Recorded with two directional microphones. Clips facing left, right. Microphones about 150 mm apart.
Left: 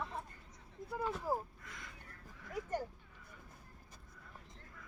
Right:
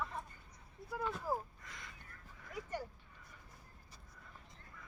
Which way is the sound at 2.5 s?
45° left (ahead or behind).